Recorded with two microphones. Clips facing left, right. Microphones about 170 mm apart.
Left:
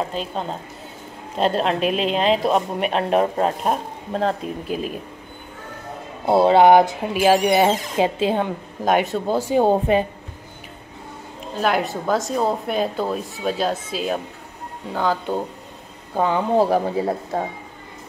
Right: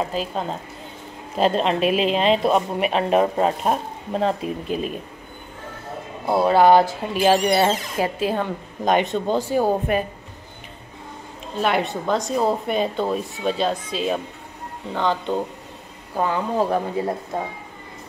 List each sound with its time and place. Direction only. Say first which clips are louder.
0.0 s speech: right 1 dB; 5° right (ahead or behind)
6.2 s speech: left 2 dB; 25° left (ahead or behind)
8.8 s speech: even; 5° left (ahead or behind)
9.6 s speech: left 6 dB; 25° left (ahead or behind)
11.6 s speech: left 1 dB; centre (ahead or behind)
16.2 s speech: left 3 dB; 25° left (ahead or behind)